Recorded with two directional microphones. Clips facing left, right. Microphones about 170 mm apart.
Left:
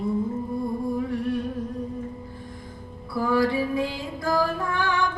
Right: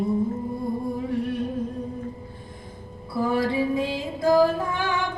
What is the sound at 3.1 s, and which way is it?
Music, 25° right (ahead or behind).